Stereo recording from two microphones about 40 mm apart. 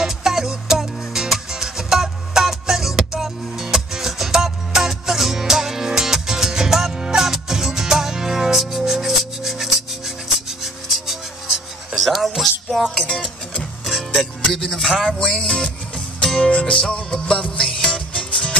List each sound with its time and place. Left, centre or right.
0.0 s music: centre
14.5 s speech: centre
16.3 s music: left
17.9 s music: left